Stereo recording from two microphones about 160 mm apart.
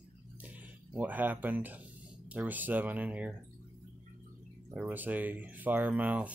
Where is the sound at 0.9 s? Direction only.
10° right (ahead or behind).